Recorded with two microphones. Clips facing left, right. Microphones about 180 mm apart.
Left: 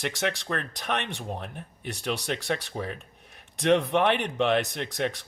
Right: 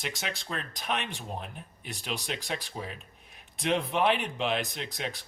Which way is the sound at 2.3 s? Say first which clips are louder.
Left 6 dB; 60° left (ahead or behind).